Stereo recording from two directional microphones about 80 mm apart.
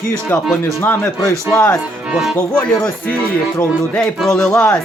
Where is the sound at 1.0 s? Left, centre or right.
Left.